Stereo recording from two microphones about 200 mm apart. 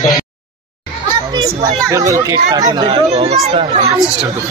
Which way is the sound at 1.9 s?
15° right (ahead or behind).